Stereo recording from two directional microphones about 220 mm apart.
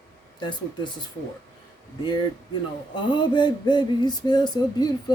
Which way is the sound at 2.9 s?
20° left (ahead or behind).